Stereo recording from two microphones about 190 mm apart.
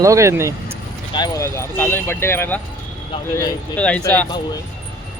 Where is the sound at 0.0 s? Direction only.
15° right (ahead or behind).